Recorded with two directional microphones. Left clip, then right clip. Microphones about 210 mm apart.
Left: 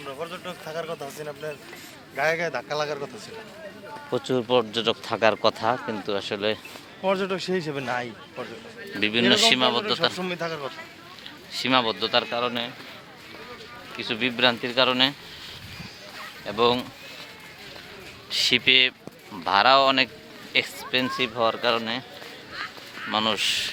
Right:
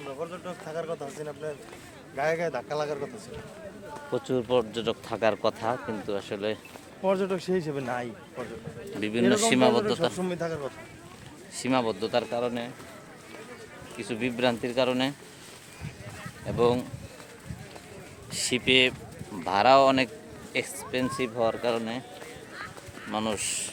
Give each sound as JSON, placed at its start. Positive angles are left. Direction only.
{"t": 0.0, "sound": "speech", "side_deg": 0}
{"t": 4.1, "sound": "speech", "side_deg": 25}
{"t": 7.0, "sound": "speech", "side_deg": 10}
{"t": 9.1, "sound": "speech", "side_deg": -10}
{"t": 10.2, "sound": "speech", "side_deg": -15}
{"t": 11.5, "sound": "speech", "side_deg": -5}
{"t": 14.0, "sound": "speech", "side_deg": 0}
{"t": 16.5, "sound": "speech", "side_deg": 0}
{"t": 18.3, "sound": "speech", "side_deg": 0}
{"t": 22.5, "sound": "a sound", "side_deg": 35}
{"t": 23.1, "sound": "speech", "side_deg": 0}